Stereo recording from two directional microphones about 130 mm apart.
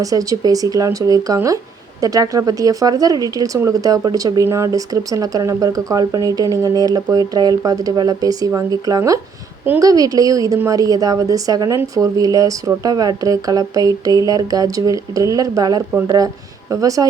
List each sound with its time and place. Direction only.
0.0 s speech: 25° right (ahead or behind)